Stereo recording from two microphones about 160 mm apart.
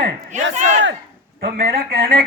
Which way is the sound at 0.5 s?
50° right (ahead or behind).